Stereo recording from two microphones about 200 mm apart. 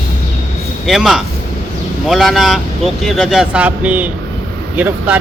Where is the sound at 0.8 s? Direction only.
Centre (ahead or behind).